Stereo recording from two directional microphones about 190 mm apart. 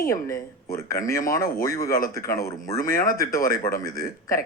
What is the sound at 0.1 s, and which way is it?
Speech, 15° left (ahead or behind).